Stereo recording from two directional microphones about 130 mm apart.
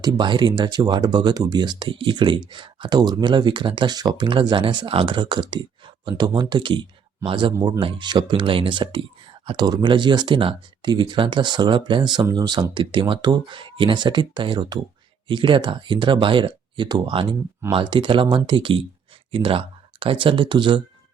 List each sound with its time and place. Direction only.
0.0 s speech: 35° right (ahead or behind)